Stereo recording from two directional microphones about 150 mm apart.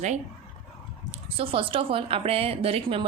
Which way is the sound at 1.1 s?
40° right (ahead or behind).